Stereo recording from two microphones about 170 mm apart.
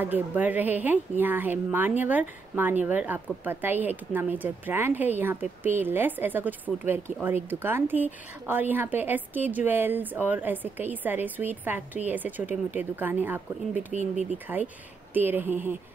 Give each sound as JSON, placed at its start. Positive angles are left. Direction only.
{"t": 0.0, "sound": "speech", "side_deg": -10}